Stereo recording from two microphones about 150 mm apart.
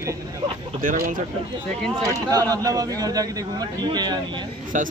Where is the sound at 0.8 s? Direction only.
70° right (ahead or behind).